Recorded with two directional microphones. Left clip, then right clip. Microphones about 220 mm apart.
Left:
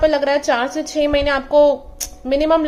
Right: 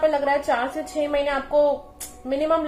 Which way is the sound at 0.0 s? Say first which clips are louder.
Left 5 dB; 45° left (ahead or behind).